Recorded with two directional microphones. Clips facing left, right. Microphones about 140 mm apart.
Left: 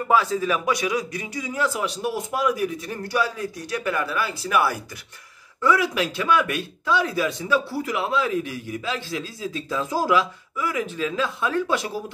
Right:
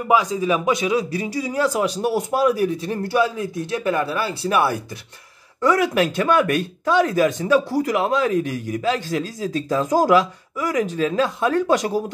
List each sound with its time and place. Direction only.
0.1 s a man's voice: 15° right (ahead or behind)
5.6 s speech: 45° right (ahead or behind)